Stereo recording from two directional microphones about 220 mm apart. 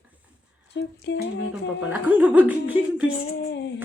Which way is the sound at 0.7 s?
50° left (ahead or behind).